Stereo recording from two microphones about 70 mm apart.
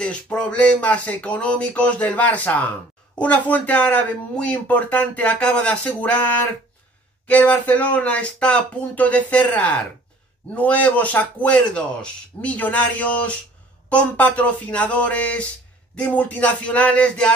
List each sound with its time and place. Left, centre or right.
0.0 s speech: centre